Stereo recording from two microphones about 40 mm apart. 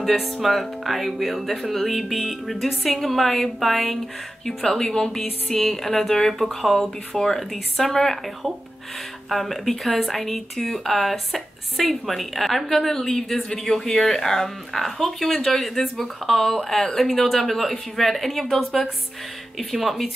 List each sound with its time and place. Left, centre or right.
0.1 s speech: centre
4.6 s speech: centre
9.3 s speech: centre